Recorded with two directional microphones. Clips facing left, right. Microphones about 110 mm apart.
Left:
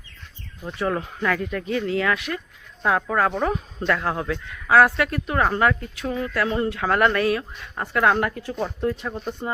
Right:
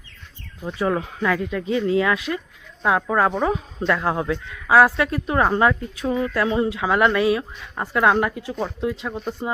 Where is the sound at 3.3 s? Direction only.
5° right (ahead or behind).